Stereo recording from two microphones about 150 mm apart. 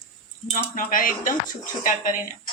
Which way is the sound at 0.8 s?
65° left (ahead or behind).